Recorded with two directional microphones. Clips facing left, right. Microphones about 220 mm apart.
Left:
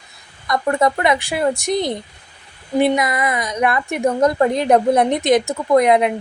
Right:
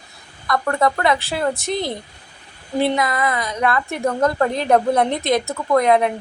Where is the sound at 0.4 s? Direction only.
20° left (ahead or behind).